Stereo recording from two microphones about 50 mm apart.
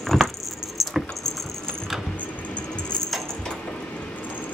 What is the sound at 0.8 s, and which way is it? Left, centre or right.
Patter, centre.